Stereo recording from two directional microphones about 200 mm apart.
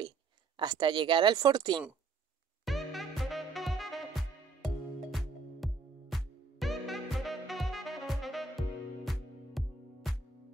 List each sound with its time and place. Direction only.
0.6 s speech: 20° right (ahead or behind)
2.6 s music: centre (ahead or behind)